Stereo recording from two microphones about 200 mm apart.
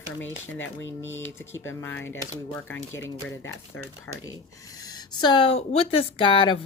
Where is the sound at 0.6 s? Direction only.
70° left (ahead or behind).